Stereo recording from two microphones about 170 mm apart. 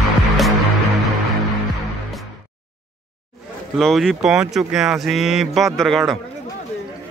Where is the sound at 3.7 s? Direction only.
Centre (ahead or behind).